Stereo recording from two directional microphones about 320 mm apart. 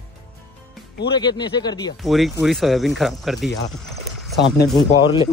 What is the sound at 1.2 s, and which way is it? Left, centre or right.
Speech, centre.